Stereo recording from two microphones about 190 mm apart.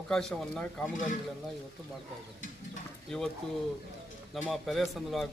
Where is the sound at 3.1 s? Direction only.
Centre (ahead or behind).